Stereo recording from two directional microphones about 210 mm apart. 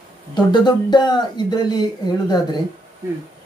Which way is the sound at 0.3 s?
20° left (ahead or behind).